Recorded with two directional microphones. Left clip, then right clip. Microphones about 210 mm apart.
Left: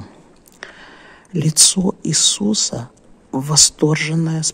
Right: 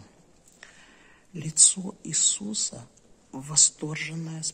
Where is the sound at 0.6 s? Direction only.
35° left (ahead or behind).